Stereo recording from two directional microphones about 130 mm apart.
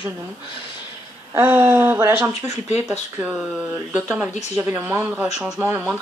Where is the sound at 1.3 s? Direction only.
15° right (ahead or behind).